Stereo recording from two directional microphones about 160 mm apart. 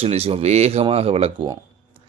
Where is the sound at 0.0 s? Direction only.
40° right (ahead or behind).